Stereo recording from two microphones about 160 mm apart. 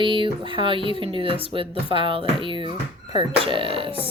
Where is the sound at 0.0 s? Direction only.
30° right (ahead or behind).